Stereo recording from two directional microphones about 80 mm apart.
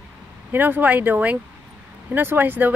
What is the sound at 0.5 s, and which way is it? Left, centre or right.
Speech, right.